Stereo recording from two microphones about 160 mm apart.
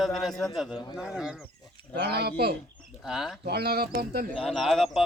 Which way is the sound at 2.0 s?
90° right.